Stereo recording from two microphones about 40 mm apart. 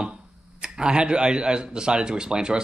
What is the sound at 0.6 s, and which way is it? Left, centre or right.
Speech, right.